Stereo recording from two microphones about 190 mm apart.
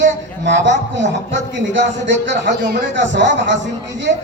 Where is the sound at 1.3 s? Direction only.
70° right (ahead or behind).